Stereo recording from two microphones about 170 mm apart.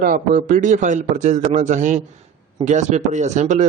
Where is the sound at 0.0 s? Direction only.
50° right (ahead or behind).